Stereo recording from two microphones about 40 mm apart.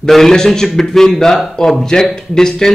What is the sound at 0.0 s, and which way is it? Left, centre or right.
A man's voice, centre.